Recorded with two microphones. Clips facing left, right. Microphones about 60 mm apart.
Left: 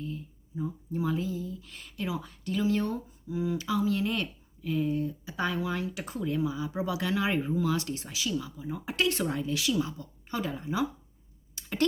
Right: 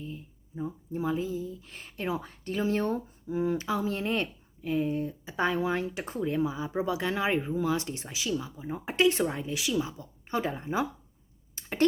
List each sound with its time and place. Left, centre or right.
0.5 s a woman's voice: right
9.0 s a woman's voice: centre
11.5 s a sound: right